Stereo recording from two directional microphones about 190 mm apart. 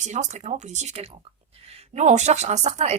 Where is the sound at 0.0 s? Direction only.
40° right (ahead or behind).